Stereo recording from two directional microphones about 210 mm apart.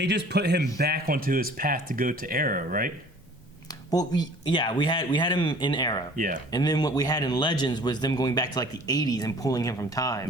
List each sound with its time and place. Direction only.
0.0 s speech: 55° right (ahead or behind)
3.9 s a man's voice: 20° left (ahead or behind)
6.1 s speech: 40° right (ahead or behind)
6.5 s a man's voice: 20° left (ahead or behind)